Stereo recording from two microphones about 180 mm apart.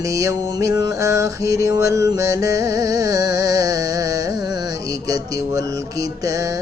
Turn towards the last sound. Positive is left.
turn(degrees=-20)  # may be behind; listen again after turning